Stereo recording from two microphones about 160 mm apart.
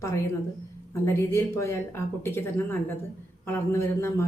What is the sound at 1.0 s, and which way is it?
Speech, 15° left (ahead or behind).